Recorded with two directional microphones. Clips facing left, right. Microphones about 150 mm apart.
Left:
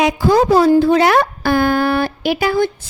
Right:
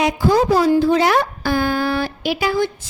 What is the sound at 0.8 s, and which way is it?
A woman's voice, 60° left (ahead or behind).